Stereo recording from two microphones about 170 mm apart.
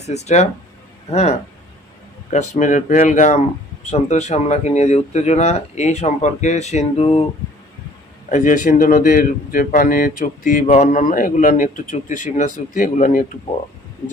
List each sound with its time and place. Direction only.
0.0 s a man's voice: 40° left (ahead or behind)
8.3 s a man's voice: 50° left (ahead or behind)